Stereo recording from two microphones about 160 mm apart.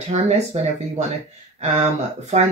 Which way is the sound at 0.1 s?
45° right (ahead or behind).